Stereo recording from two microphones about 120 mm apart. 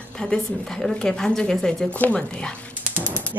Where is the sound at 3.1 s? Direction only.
15° right (ahead or behind).